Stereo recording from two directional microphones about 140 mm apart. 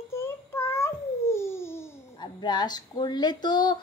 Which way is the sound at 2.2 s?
30° left (ahead or behind).